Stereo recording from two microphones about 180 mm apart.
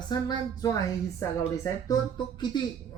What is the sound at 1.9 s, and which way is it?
Speech, 25° left (ahead or behind).